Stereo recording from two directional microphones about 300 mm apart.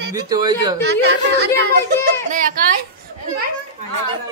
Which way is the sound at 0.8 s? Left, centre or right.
Right.